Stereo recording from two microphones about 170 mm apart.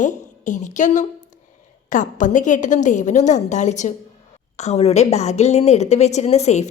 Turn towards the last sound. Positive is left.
turn(degrees=40)  # may be behind; listen again after turning